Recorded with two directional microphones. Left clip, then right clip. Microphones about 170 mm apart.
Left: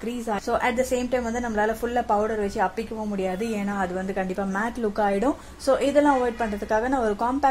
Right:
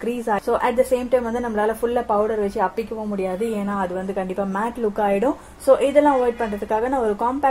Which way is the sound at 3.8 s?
25° left (ahead or behind).